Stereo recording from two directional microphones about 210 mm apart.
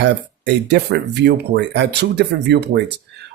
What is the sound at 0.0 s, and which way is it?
Speech, 55° right (ahead or behind).